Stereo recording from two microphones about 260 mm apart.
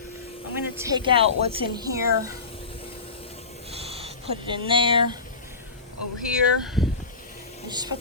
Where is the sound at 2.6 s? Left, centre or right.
Left.